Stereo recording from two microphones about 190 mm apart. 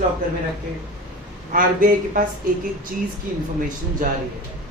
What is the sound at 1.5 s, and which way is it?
Speech, 45° right (ahead or behind).